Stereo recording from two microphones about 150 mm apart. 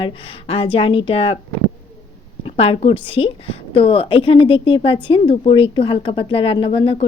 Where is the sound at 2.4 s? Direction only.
40° left (ahead or behind).